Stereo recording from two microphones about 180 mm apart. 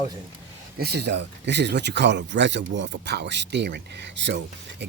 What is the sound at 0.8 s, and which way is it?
Speech, 65° right (ahead or behind).